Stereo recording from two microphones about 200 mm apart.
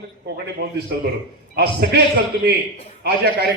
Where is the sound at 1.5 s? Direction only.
50° right (ahead or behind).